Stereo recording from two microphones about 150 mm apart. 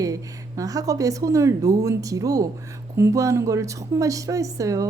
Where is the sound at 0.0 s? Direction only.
20° right (ahead or behind).